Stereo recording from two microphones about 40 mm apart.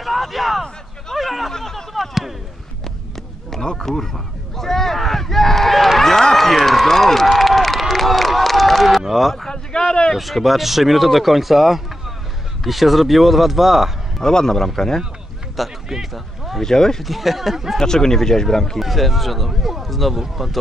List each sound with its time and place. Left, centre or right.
0.0 s a sound: centre
1.5 s a sound: centre
3.4 s a sound: centre
6.3 s run: centre
7.9 s crowd: centre
9.0 s speech: centre
9.5 s a sound: left
10.1 s speech: centre
14.2 s speech: centre
15.5 s speech: centre
16.6 s speech: centre
17.0 s speech: centre
17.7 s speech: centre
18.8 s speech: centre